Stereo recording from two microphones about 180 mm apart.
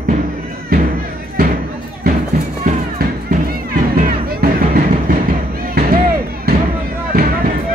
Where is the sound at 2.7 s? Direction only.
50° right (ahead or behind).